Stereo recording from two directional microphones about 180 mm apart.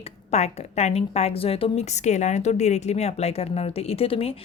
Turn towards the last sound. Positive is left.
turn(degrees=35)  # may be behind; listen again after turning